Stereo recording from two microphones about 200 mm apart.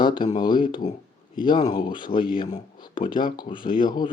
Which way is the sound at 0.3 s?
20° left (ahead or behind).